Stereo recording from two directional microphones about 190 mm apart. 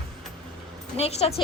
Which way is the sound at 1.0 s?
35° left (ahead or behind).